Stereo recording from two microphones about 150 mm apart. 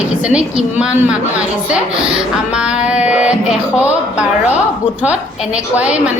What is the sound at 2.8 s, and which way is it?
Speech, 10° right (ahead or behind).